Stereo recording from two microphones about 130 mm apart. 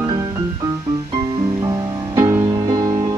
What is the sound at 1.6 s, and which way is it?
Music, 30° right (ahead or behind).